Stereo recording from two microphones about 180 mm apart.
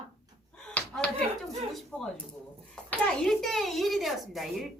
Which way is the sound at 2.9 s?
5° left (ahead or behind).